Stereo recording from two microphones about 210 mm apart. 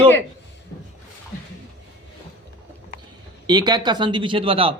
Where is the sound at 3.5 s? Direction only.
20° right (ahead or behind).